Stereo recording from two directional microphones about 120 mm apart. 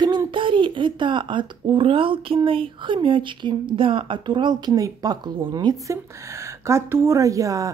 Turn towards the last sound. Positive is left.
turn(degrees=-25)  # may be behind; listen again after turning